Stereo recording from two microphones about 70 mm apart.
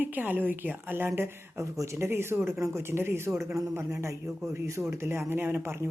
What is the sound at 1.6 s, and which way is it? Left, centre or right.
A man's voice, right.